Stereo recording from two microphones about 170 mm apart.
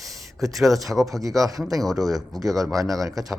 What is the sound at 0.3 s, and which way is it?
Speech, centre (ahead or behind).